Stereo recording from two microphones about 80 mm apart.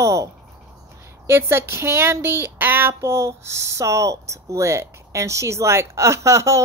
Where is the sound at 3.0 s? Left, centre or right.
Right.